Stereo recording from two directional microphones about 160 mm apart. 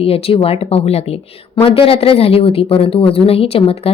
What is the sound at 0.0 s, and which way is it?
A woman's voice, 35° left (ahead or behind).